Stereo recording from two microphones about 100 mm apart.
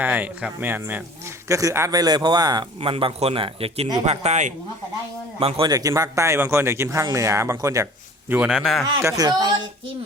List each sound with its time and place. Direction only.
0.0 s speech: 15° right (ahead or behind)
1.9 s speech: 40° right (ahead or behind)
2.8 s speech: 70° right (ahead or behind)
4.0 s speech: 90° right
5.4 s speech: 70° right (ahead or behind)
5.6 s speech: 35° right (ahead or behind)
8.4 s speech: 5° left (ahead or behind)
9.0 s speech: 35° right (ahead or behind)